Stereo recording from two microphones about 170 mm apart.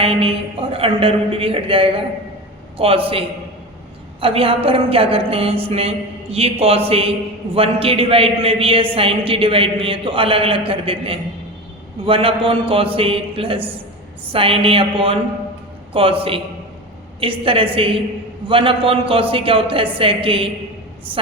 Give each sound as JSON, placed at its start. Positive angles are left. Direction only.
{"t": 0.0, "sound": "a man's voice", "side_deg": -35}